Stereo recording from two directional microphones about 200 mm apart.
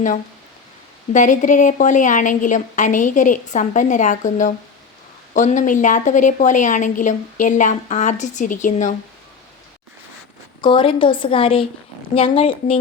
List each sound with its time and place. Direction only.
1.1 s a woman's voice: 40° left (ahead or behind)
10.6 s a woman's voice: 25° left (ahead or behind)